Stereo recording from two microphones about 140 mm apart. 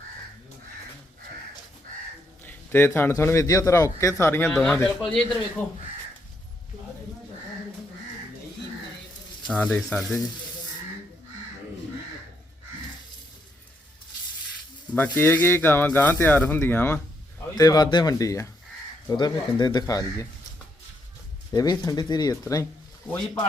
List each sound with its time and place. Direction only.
2.4 s a man's voice: 15° left (ahead or behind)
4.5 s speech: 5° left (ahead or behind)
9.5 s speech: 10° left (ahead or behind)
14.9 s speech: 15° left (ahead or behind)
17.5 s a man's voice: 30° left (ahead or behind)
21.5 s a man's voice: 25° left (ahead or behind)